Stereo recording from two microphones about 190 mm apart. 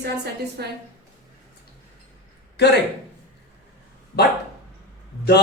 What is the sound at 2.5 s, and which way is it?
Speech, 60° left (ahead or behind).